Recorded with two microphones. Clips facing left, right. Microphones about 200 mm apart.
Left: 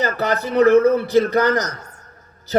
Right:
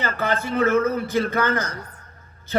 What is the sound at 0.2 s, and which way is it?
A man's voice, 40° left (ahead or behind).